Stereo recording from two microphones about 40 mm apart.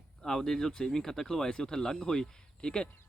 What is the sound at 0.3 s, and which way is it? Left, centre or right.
Speech, centre.